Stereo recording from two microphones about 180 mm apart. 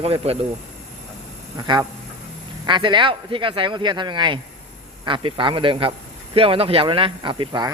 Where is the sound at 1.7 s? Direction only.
25° right (ahead or behind).